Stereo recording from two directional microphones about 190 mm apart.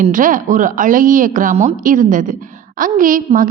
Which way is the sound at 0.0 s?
45° right (ahead or behind).